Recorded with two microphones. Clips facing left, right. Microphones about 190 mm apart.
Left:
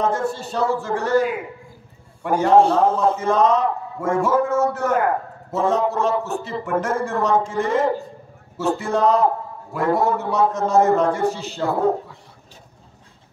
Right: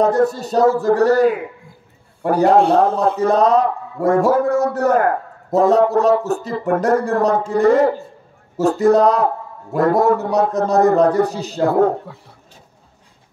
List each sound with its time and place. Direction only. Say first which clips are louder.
0.0 s a man's voice: right 7 dB; 40° right (ahead or behind)
2.6 s a man's voice: right 2 dB; 65° right (ahead or behind)
3.2 s a man's voice: right 4 dB; 35° right (ahead or behind)